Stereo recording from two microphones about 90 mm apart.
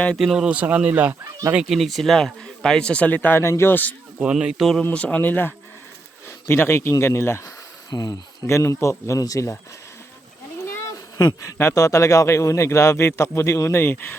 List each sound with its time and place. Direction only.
0.2 s speech: centre (ahead or behind)
0.4 s speech: 15° right (ahead or behind)
1.2 s speech: 40° right (ahead or behind)
1.5 s speech: centre (ahead or behind); by 3.9 s 25° left (ahead or behind)
4.2 s speech: 10° right (ahead or behind)
4.8 s speech: 15° left (ahead or behind)
7.9 s speech: 50° left (ahead or behind)
8.4 s a man's voice: 30° left (ahead or behind)
11.3 s a man's voice: 35° left (ahead or behind)